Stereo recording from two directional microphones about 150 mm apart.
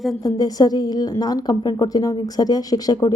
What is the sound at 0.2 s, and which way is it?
Speech, 25° left (ahead or behind).